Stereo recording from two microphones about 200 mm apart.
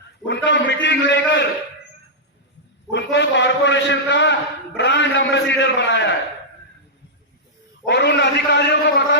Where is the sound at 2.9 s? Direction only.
60° left (ahead or behind).